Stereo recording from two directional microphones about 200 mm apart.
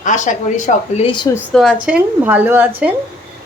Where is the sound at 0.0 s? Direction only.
40° left (ahead or behind).